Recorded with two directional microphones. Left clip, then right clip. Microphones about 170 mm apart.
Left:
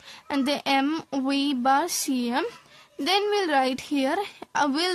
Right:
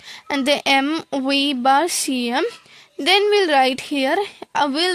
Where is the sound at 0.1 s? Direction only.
25° right (ahead or behind).